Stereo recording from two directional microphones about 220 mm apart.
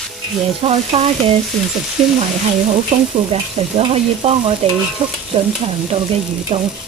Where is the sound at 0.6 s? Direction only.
25° right (ahead or behind).